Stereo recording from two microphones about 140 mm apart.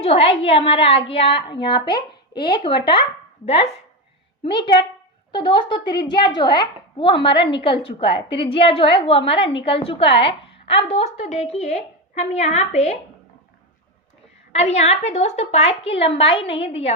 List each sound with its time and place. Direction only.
0.0 s a woman's voice: 45° left (ahead or behind)
4.4 s a woman's voice: 35° left (ahead or behind); by 13.0 s 50° left (ahead or behind)
14.5 s a woman's voice: 50° left (ahead or behind)